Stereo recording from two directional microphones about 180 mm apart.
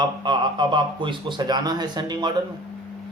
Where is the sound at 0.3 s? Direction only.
25° right (ahead or behind).